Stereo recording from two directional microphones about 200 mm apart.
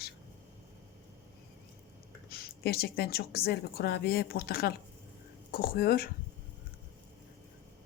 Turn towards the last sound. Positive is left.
turn(degrees=50)  # may be behind; listen again after turning